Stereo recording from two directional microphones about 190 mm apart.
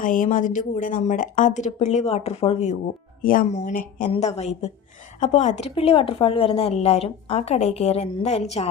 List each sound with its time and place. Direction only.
0.0 s a woman's voice: 45° left (ahead or behind)
3.2 s a woman's voice: 45° left (ahead or behind)